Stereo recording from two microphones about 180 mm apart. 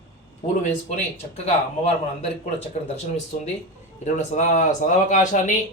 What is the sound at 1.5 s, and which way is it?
Speech, 35° left (ahead or behind).